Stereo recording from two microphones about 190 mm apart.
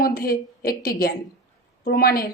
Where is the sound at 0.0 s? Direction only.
50° left (ahead or behind).